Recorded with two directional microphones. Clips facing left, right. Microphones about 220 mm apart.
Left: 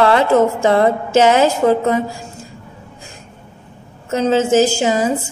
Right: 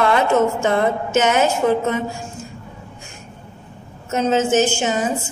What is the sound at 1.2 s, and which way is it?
Speech, 90° left.